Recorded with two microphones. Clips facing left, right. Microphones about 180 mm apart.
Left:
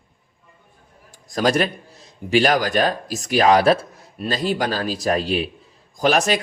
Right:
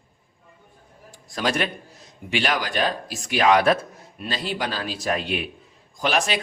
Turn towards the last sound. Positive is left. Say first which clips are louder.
# left 5 dB
turn(degrees=40)  # may be behind; listen again after turning